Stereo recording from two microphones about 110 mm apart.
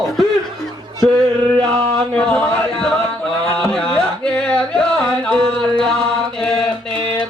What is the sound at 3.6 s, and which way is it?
Music, 5° left (ahead or behind).